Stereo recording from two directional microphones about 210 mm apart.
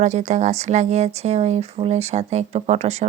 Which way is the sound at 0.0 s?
35° right (ahead or behind).